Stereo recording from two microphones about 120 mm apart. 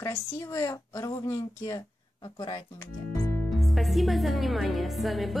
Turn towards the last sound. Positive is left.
turn(degrees=0)  # may be behind; listen again after turning